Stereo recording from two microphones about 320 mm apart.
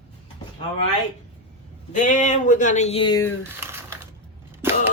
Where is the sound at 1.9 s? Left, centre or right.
Left.